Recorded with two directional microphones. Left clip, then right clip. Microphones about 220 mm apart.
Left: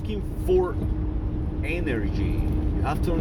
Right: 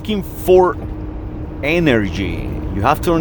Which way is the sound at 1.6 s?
40° right (ahead or behind).